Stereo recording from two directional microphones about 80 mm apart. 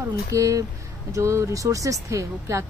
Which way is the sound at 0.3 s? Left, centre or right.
Right.